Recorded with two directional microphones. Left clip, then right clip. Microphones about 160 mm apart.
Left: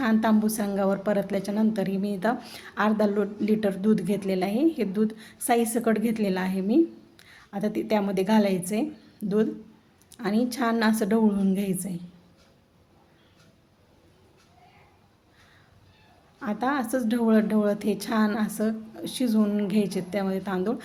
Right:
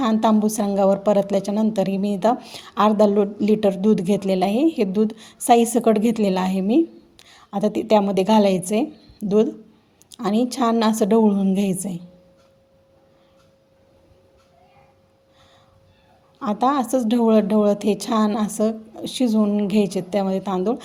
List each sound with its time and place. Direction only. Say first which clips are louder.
0.0 s a woman's voice: right 5 dB; 30° right (ahead or behind)
16.4 s a woman's voice: right 7 dB; 30° right (ahead or behind)